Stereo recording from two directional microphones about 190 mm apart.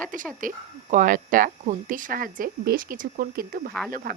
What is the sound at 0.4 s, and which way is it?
Speech, 45° right (ahead or behind).